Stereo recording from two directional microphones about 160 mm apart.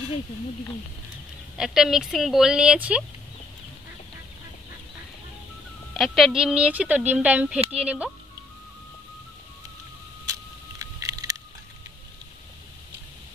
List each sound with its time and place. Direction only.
1.6 s speech: 5° right (ahead or behind)
5.9 s speech: centre (ahead or behind)
10.8 s a sound: 20° right (ahead or behind)